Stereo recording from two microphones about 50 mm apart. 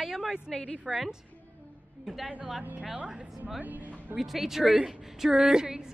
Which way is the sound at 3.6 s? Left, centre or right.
Right.